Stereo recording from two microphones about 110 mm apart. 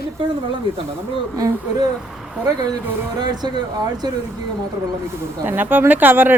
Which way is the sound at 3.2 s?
40° right (ahead or behind).